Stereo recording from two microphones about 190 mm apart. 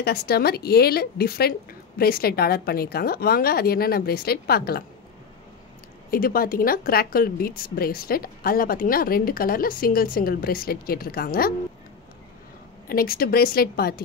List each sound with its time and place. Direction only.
0.0 s a woman's voice: 55° left (ahead or behind)
6.0 s a woman's voice: 50° left (ahead or behind)
12.8 s a woman's voice: 50° left (ahead or behind)